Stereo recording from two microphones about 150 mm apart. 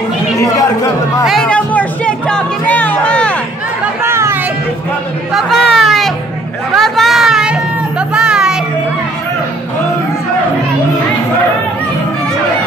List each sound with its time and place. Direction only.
1.2 s music: centre (ahead or behind)
3.8 s chatter: 15° right (ahead or behind)
5.3 s chatter: centre (ahead or behind)
6.7 s music: centre (ahead or behind)